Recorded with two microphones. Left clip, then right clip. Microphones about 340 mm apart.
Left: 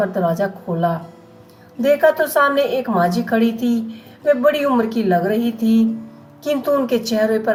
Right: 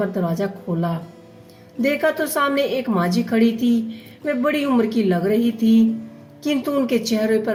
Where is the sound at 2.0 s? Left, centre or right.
Left.